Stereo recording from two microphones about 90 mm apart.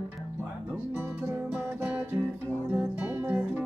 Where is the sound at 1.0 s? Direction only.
20° right (ahead or behind).